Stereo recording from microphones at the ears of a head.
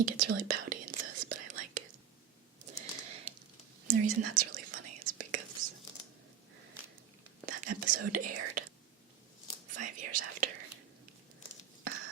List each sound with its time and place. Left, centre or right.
0.0 s whispering: right
2.6 s typing: right
3.8 s whispering: right
7.4 s whispering: right